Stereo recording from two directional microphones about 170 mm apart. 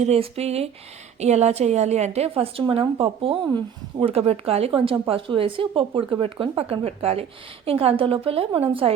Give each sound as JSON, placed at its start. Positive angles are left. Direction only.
{"t": 0.0, "sound": "speech", "side_deg": -35}